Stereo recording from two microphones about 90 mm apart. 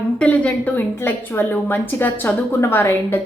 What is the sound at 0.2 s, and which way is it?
A woman's voice, 15° left (ahead or behind).